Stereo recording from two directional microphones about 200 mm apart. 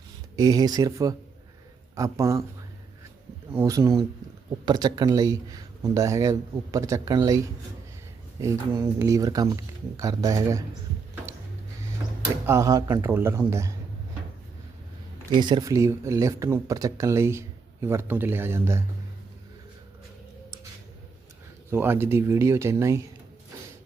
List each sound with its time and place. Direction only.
0.3 s speech: 20° right (ahead or behind)
3.5 s speech: 15° right (ahead or behind)
12.5 s speech: 15° right (ahead or behind)
15.3 s speech: 20° right (ahead or behind)
21.7 s speech: 10° right (ahead or behind)